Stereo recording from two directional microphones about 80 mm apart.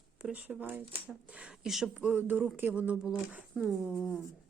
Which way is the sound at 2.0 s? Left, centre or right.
Right.